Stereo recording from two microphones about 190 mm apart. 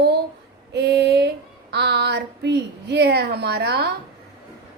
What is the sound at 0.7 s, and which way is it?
Speech, 60° right (ahead or behind).